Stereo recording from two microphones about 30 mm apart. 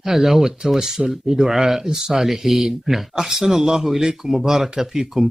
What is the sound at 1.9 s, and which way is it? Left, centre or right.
Speech, right.